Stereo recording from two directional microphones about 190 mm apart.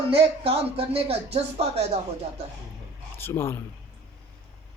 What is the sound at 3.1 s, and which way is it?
Speech, 10° left (ahead or behind).